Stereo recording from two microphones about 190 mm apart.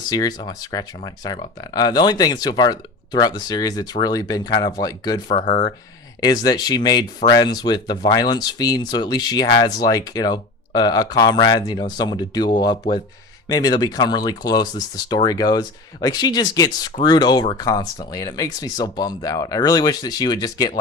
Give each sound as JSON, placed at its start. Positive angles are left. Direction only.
{"t": 0.1, "sound": "speech", "side_deg": 20}